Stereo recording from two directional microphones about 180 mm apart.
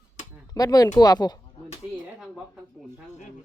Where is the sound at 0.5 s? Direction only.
20° left (ahead or behind).